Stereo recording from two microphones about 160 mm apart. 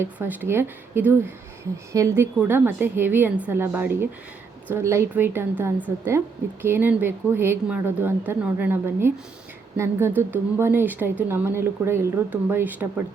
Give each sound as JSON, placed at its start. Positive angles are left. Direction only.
{"t": 0.0, "sound": "speech", "side_deg": -10}